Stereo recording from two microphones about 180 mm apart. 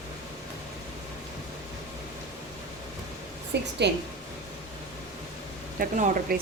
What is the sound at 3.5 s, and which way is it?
Speech, 70° right (ahead or behind).